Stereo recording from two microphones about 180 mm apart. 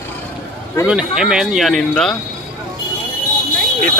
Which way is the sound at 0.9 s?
5° right (ahead or behind).